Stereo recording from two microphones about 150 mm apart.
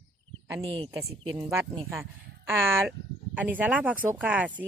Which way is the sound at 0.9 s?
20° right (ahead or behind).